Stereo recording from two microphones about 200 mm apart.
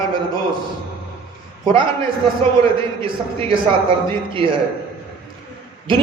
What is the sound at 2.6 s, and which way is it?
Speech, 25° right (ahead or behind).